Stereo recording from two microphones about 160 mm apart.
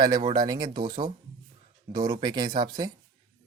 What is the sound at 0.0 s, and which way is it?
Speech, 25° right (ahead or behind).